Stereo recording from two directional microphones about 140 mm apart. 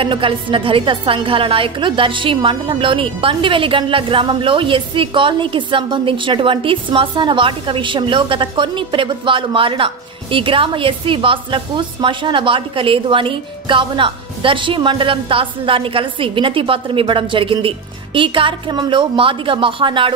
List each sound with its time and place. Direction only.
0.0 s a woman's voice: 40° right (ahead or behind)